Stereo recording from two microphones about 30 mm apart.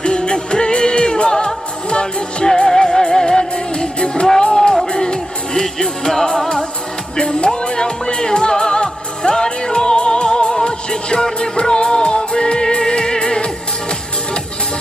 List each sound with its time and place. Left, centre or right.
0.0 s music: left
2.6 s music: centre
7.2 s music: left